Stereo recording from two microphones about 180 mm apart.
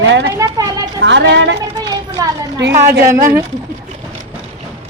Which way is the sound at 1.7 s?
20° right (ahead or behind).